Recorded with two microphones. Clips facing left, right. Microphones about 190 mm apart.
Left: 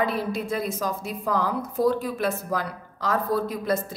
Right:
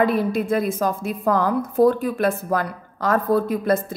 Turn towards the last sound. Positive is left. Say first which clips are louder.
# right 6 dB
turn(degrees=-55)  # may be behind; listen again after turning